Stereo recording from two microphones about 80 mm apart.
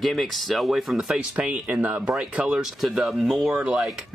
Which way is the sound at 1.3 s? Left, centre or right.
Centre.